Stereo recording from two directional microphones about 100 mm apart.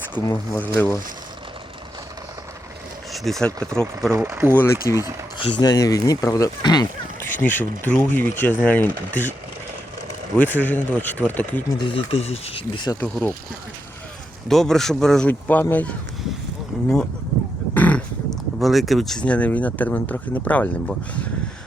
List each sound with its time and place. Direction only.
0.6 s speech: 15° left (ahead or behind)
3.1 s speech: 5° left (ahead or behind)
4.2 s speech: 25° right (ahead or behind)
4.5 s speech: 25° left (ahead or behind)
5.4 s speech: 60° left (ahead or behind)
5.6 s speech: 40° left (ahead or behind)
7.2 s speech: 20° left (ahead or behind)
10.3 s speech: 15° left (ahead or behind)
11.8 s speech: 65° left (ahead or behind)
14.4 s speech: 5° left (ahead or behind)
15.3 s speech: 15° left (ahead or behind)
17.7 s livestock: 15° left (ahead or behind)
18.3 s speech: centre (ahead or behind)